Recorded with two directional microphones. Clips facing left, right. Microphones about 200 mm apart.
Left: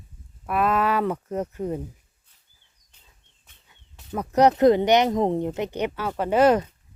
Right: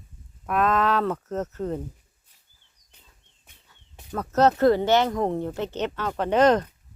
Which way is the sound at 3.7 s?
15° left (ahead or behind).